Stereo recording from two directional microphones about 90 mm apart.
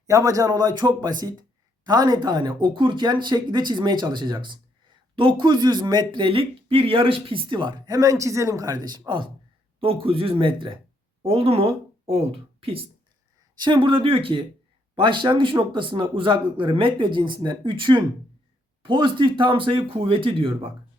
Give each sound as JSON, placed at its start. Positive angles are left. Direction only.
{"t": 0.1, "sound": "a man's voice", "side_deg": -40}
{"t": 7.9, "sound": "speech", "side_deg": -40}
{"t": 9.8, "sound": "speech", "side_deg": -90}
{"t": 11.2, "sound": "speech", "side_deg": -90}
{"t": 13.6, "sound": "speech", "side_deg": -60}
{"t": 14.9, "sound": "a man's voice", "side_deg": -65}